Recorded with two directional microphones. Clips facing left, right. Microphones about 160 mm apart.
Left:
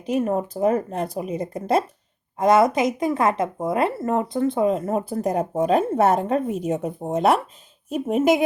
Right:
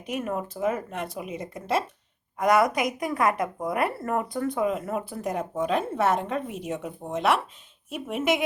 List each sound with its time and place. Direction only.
0.0 s speech: 30° left (ahead or behind)
2.4 s speech: 25° left (ahead or behind)